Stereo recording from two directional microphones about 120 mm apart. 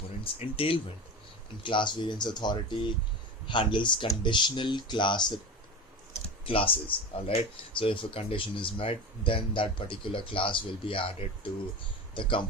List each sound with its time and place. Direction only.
0.3 s speech: 50° left (ahead or behind)
6.4 s speech: 50° left (ahead or behind)